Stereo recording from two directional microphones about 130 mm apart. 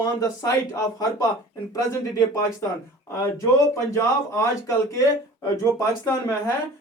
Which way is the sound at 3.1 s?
25° left (ahead or behind).